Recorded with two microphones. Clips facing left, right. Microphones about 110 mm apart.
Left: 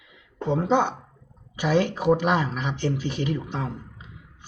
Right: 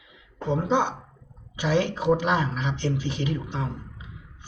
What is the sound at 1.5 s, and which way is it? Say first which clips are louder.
Speech: left 2 dB; 50° left (ahead or behind).